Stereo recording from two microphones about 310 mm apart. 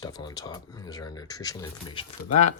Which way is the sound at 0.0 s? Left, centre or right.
Centre.